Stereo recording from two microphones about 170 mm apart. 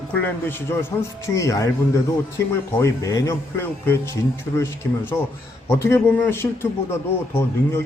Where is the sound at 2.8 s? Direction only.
20° left (ahead or behind).